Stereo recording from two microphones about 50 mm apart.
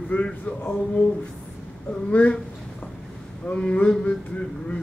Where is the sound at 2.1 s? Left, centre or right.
Left.